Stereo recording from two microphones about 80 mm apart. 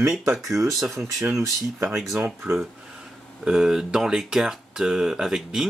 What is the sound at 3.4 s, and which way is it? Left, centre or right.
Speech, centre.